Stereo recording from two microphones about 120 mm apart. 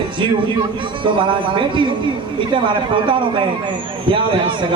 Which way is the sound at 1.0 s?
45° right (ahead or behind).